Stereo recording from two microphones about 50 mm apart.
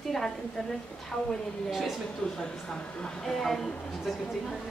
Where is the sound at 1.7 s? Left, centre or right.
Centre.